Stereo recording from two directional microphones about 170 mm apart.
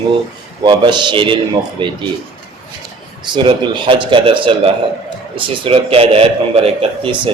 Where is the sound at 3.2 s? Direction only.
25° right (ahead or behind).